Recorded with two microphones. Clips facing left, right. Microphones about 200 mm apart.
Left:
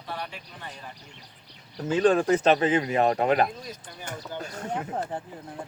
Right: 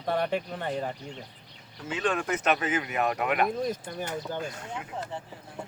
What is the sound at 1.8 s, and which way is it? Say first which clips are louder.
Speech: left 8 dB; 35° left (ahead or behind).